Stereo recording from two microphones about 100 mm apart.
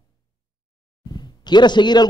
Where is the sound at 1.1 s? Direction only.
45° left (ahead or behind).